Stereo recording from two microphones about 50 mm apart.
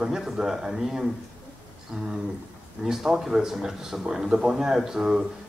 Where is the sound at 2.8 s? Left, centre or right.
Centre.